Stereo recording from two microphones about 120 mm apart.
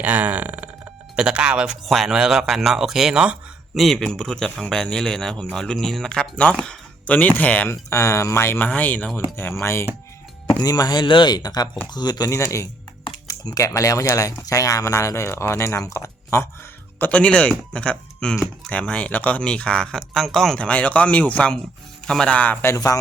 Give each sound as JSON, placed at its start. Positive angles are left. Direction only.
{"t": 0.0, "sound": "a man's voice", "side_deg": -15}
{"t": 7.9, "sound": "speech", "side_deg": 25}
{"t": 10.6, "sound": "speech", "side_deg": 30}
{"t": 17.0, "sound": "speech", "side_deg": 10}
{"t": 22.7, "sound": "speech", "side_deg": 30}